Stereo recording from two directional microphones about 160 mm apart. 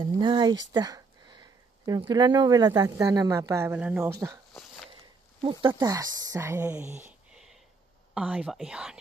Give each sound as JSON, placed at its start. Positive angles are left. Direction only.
{"t": 0.0, "sound": "speech", "side_deg": -30}
{"t": 5.4, "sound": "speech", "side_deg": -30}
{"t": 5.8, "sound": "speech", "side_deg": -20}